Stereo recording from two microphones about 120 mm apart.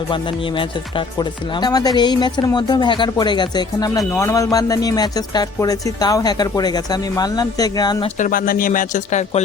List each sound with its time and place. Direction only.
1.6 s speech: 35° left (ahead or behind)
8.7 s speech: 85° left